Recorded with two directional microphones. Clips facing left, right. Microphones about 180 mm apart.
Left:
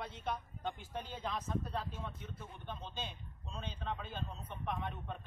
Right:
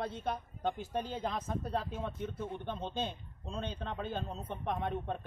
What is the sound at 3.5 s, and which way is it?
A man's voice, 60° right (ahead or behind).